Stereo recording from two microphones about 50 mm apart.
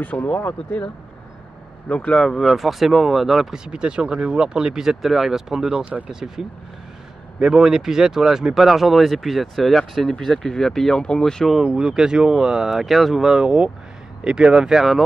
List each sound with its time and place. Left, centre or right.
0.0 s speech: left
1.9 s speech: left
2.2 s speech: centre
11.6 s speech: centre